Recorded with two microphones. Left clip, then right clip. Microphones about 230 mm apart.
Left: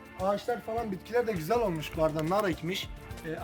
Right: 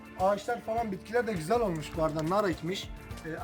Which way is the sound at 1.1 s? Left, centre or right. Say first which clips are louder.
Left 1 dB; centre.